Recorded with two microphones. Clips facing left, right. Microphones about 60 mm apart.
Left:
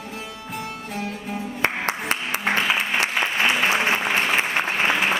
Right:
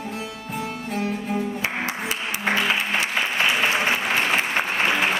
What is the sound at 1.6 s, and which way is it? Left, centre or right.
Music, left.